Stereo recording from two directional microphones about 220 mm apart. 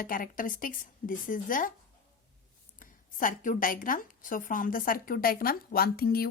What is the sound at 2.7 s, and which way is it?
A woman's voice, 40° left (ahead or behind).